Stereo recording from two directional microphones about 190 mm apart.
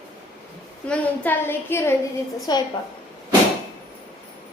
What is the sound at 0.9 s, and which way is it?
A woman's voice, 10° left (ahead or behind).